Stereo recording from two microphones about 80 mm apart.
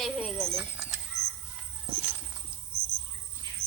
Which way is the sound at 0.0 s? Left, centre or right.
Centre.